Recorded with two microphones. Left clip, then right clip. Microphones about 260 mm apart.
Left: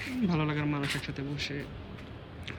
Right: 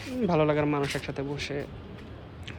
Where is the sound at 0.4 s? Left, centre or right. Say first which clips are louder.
Right 7 dB; centre.